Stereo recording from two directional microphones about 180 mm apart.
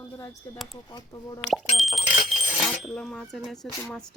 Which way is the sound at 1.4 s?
Centre (ahead or behind).